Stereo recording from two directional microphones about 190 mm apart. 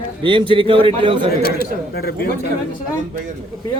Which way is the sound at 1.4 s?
50° left (ahead or behind).